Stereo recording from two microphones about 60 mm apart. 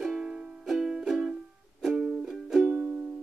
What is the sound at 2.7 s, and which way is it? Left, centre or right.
Music, right.